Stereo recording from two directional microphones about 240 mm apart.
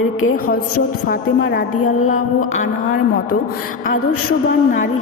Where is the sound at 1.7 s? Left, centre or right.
Left.